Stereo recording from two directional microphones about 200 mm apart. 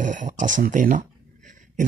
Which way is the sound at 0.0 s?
40° right (ahead or behind).